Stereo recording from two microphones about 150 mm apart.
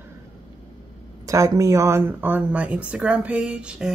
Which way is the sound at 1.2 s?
20° right (ahead or behind).